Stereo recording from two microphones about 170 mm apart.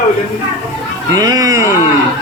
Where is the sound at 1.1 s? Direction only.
20° right (ahead or behind).